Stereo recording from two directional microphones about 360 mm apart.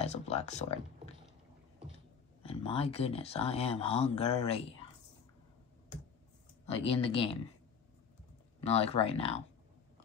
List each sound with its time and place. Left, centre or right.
0.0 s speech: centre
2.4 s speech: centre
6.6 s speech: centre
8.6 s speech: centre